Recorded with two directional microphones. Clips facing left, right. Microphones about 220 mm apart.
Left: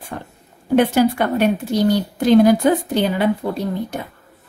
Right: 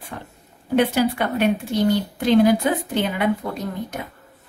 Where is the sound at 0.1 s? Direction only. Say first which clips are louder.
Left 4 dB; 45° left (ahead or behind).